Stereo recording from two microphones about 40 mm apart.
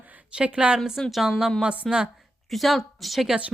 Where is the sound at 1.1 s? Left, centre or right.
Centre.